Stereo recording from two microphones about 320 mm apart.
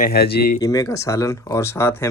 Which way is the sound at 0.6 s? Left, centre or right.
Centre.